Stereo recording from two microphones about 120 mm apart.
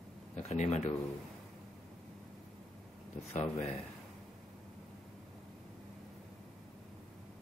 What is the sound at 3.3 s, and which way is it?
Speech, 70° left (ahead or behind).